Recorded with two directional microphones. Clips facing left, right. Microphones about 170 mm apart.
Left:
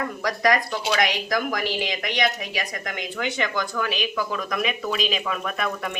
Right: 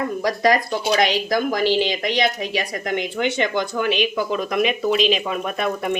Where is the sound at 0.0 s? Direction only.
25° right (ahead or behind).